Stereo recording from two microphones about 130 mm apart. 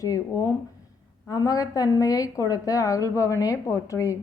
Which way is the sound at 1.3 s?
30° left (ahead or behind).